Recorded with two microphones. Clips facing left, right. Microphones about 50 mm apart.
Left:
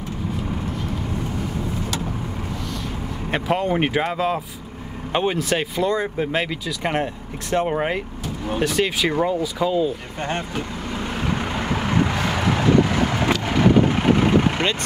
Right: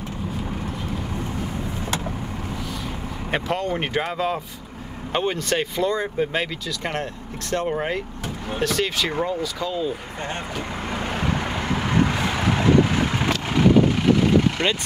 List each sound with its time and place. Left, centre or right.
3.3 s speech: centre
3.5 s speech: centre
11.6 s vehicle: left
12.0 s vehicle: centre
13.6 s vehicle: left